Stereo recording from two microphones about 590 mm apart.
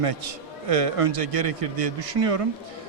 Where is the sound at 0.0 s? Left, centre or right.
Right.